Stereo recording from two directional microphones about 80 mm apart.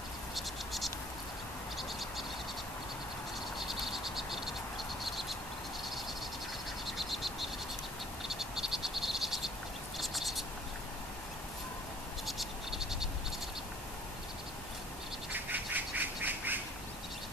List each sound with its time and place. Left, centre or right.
0.3 s frog: centre
3.5 s frog: centre
6.9 s frog: centre
9.9 s a sound: centre
12.3 s frog: centre
15.3 s bird: right